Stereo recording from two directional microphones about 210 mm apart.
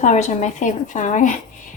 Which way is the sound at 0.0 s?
35° left (ahead or behind).